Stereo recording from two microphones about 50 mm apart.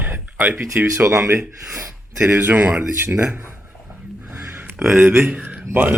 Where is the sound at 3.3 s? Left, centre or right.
Right.